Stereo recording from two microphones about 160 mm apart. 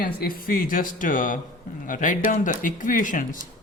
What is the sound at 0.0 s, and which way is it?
Speech, 65° left (ahead or behind).